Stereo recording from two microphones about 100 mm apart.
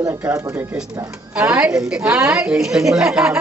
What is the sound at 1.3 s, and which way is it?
A woman's voice, 10° right (ahead or behind).